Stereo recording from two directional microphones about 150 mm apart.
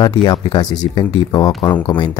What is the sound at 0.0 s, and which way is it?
Speech, 30° left (ahead or behind).